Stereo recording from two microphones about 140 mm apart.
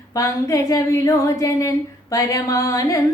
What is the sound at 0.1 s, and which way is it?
Speech, 25° left (ahead or behind).